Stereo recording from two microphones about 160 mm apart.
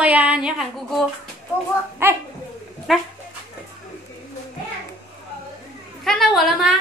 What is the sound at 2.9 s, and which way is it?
Speech, centre (ahead or behind).